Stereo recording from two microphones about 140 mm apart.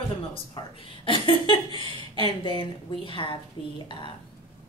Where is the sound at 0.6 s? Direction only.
35° left (ahead or behind).